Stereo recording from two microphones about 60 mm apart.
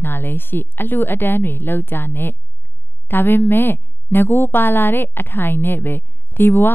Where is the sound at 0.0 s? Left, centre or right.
Left.